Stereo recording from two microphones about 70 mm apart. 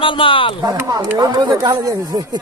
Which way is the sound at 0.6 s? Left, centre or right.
Right.